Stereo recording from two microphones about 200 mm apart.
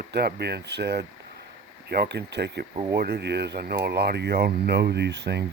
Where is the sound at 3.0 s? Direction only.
55° right (ahead or behind).